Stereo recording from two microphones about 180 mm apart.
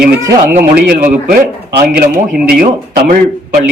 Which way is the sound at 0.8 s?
50° right (ahead or behind).